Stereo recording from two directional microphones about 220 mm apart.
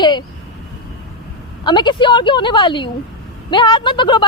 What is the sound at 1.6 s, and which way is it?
A woman's voice, 20° left (ahead or behind).